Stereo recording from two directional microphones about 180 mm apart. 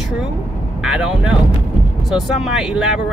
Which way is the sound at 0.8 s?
5° right (ahead or behind).